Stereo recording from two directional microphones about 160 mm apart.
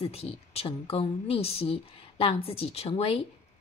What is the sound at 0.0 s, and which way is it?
A woman's voice, 40° left (ahead or behind).